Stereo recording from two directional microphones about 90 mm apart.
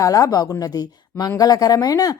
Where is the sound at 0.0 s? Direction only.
40° left (ahead or behind).